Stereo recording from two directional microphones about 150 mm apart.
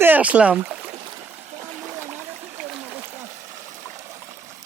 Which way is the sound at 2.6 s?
15° right (ahead or behind).